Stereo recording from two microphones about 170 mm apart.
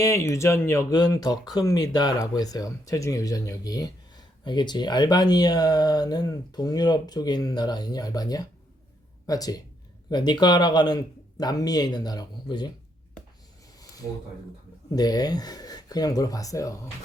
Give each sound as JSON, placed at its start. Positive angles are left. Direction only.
{"t": 0.0, "sound": "speech", "side_deg": 15}
{"t": 14.9, "sound": "speech", "side_deg": 25}